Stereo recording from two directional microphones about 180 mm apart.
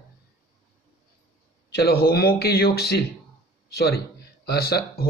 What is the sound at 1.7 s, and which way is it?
Speech, 60° left (ahead or behind).